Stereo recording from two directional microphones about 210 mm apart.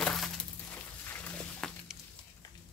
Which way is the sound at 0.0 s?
5° left (ahead or behind).